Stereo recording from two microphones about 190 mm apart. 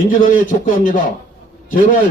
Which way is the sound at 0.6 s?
45° left (ahead or behind).